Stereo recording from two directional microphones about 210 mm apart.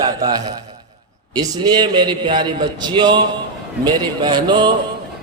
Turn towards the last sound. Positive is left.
turn(degrees=-20)  # may be behind; listen again after turning